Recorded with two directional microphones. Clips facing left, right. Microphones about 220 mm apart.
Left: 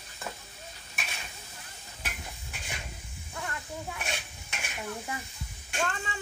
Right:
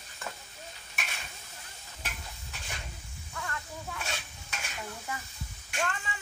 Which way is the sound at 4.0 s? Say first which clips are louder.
Left 2 dB; 20° left (ahead or behind).